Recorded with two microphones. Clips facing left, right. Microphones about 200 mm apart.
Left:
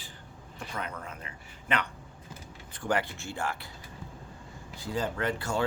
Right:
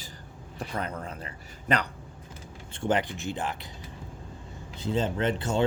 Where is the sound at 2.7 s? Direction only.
25° right (ahead or behind).